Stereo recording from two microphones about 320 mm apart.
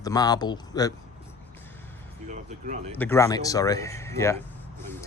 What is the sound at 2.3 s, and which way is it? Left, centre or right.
Speech, right.